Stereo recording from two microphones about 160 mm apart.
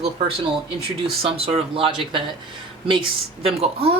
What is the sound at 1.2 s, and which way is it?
Speech, 35° right (ahead or behind).